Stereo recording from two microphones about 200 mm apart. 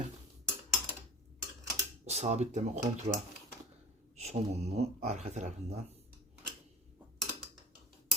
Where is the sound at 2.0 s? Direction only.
35° right (ahead or behind).